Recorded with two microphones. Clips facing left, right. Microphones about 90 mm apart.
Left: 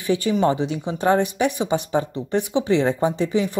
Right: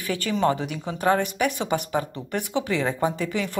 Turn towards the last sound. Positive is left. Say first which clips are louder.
# left 5 dB
turn(degrees=20)  # may be behind; listen again after turning